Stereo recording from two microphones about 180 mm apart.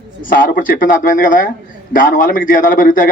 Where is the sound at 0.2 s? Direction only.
50° left (ahead or behind).